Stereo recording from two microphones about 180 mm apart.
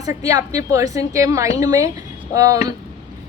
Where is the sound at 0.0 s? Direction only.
20° right (ahead or behind).